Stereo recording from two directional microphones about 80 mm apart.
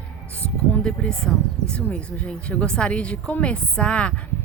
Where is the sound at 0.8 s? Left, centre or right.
Centre.